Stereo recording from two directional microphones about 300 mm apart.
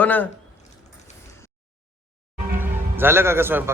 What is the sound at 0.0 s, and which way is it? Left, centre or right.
Speech, centre.